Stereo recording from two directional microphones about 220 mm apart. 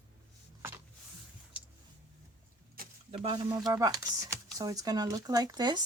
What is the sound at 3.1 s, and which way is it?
Speech, 20° right (ahead or behind).